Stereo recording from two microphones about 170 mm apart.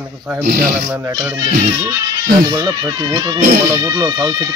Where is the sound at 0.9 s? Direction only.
20° right (ahead or behind).